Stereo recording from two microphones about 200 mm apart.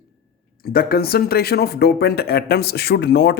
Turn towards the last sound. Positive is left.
turn(degrees=60)  # may be behind; listen again after turning